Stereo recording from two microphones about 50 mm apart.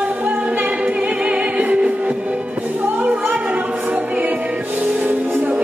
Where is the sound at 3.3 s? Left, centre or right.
Right.